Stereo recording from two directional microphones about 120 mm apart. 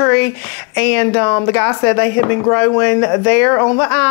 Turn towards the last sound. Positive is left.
turn(degrees=20)  # may be behind; listen again after turning